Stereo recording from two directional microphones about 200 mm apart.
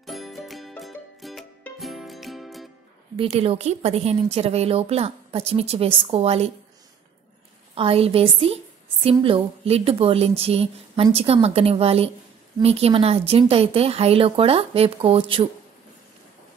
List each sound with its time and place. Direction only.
0.0 s music: centre (ahead or behind)
3.2 s a woman's voice: 30° right (ahead or behind)
7.7 s speech: 30° right (ahead or behind)